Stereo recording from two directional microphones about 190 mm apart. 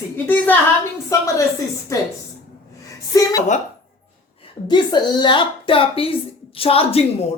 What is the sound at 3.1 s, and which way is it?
Speech, 20° left (ahead or behind).